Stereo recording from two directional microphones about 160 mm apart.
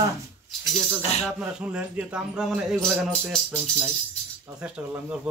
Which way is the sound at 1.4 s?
10° right (ahead or behind).